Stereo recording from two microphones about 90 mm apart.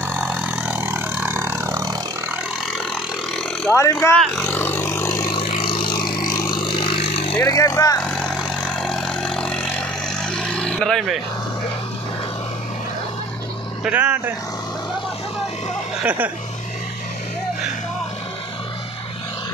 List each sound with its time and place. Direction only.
0.1 s vehicle: 20° right (ahead or behind)
1.1 s a sound: 20° right (ahead or behind); by 2.0 s 40° right (ahead or behind)
3.7 s speech: 30° left (ahead or behind)
4.5 s a sound: 20° left (ahead or behind)
5.4 s vehicle: 85° left
7.4 s speech: 40° left (ahead or behind)
8.0 s vehicle: centre (ahead or behind)
13.8 s speech: 20° right (ahead or behind)
16.0 s speech: 20° right (ahead or behind)